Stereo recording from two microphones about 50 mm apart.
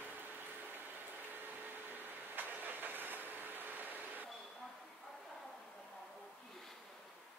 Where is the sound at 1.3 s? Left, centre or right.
Right.